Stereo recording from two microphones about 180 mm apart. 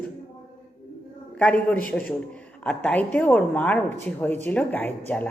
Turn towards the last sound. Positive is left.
turn(degrees=10)  # may be behind; listen again after turning